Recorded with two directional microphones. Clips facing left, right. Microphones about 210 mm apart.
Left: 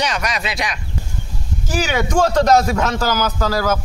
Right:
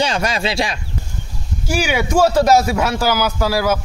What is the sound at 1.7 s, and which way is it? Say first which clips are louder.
A man's voice: right 1 dB; 10° right (ahead or behind).